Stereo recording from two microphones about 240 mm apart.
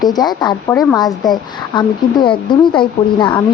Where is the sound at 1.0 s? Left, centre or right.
Centre.